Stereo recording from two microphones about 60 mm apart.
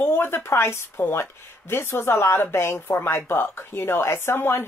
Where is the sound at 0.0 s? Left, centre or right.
Left.